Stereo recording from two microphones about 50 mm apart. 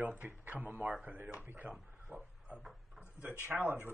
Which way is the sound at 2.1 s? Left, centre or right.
Right.